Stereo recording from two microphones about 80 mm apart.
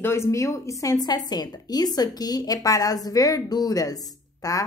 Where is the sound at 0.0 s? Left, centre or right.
Left.